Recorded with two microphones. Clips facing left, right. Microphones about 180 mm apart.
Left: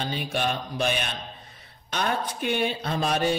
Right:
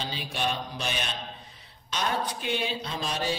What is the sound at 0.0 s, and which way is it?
Speech, 55° left (ahead or behind).